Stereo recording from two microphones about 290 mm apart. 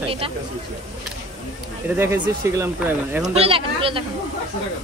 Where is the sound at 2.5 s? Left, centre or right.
Centre.